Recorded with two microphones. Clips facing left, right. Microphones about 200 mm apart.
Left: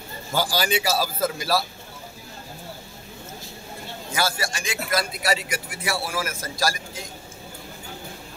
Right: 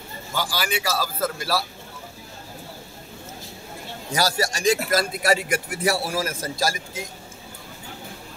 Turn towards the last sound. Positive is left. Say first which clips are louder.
# right 1 dB
turn(degrees=-20)  # may be behind; listen again after turning